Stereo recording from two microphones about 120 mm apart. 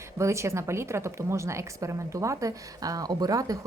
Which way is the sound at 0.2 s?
25° right (ahead or behind).